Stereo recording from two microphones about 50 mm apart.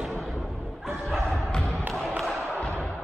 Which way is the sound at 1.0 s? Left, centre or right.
Centre.